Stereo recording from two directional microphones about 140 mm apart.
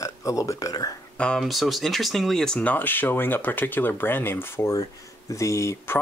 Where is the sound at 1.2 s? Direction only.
5° left (ahead or behind).